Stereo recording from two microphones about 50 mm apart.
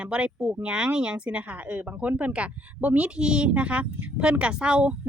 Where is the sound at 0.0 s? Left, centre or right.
Right.